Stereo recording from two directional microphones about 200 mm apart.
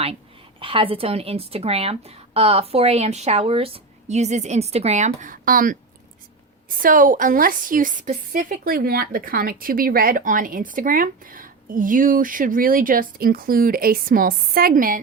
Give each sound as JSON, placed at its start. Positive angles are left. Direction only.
{"t": 0.6, "sound": "a woman's voice", "side_deg": -25}
{"t": 6.8, "sound": "a woman's voice", "side_deg": -40}